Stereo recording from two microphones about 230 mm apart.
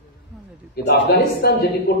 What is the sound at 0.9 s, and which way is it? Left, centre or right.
Speech, left.